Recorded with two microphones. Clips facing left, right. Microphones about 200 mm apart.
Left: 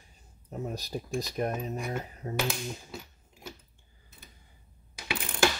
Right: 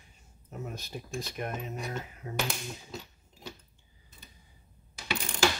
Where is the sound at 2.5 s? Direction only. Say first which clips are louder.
Left 3 dB; 5° left (ahead or behind).